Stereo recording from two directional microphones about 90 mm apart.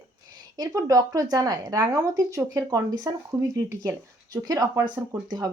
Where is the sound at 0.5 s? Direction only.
40° right (ahead or behind).